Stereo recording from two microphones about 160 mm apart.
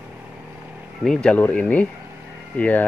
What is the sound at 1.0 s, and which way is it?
Speech, 5° left (ahead or behind).